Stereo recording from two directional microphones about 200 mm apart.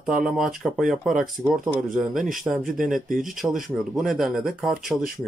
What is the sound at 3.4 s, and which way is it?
Speech, centre (ahead or behind).